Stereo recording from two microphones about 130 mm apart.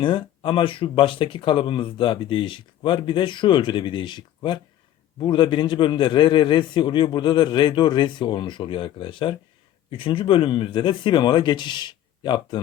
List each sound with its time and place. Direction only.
0.0 s speech: 40° left (ahead or behind)